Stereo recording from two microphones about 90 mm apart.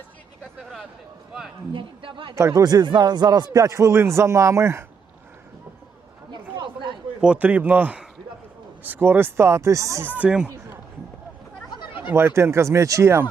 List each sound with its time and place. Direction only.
0.6 s a sound: 5° right (ahead or behind)
1.7 s speech: 70° right (ahead or behind)
2.3 s speech: 35° right (ahead or behind)
6.3 s chatter: 65° right (ahead or behind)
7.2 s speech: 15° right (ahead or behind); by 10.0 s 35° right (ahead or behind)
10.0 s speech: 15° right (ahead or behind)
11.7 s a sound: 60° left (ahead or behind)
12.1 s speech: 30° right (ahead or behind)